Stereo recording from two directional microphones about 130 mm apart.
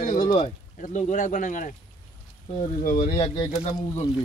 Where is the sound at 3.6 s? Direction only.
50° left (ahead or behind).